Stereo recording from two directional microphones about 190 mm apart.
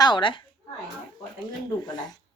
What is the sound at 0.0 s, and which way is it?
Speech, 25° left (ahead or behind).